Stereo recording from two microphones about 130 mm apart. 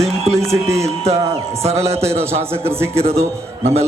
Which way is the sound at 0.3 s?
20° right (ahead or behind).